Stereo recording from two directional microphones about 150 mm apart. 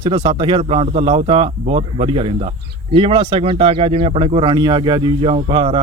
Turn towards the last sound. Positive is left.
turn(degrees=-35)  # may be behind; listen again after turning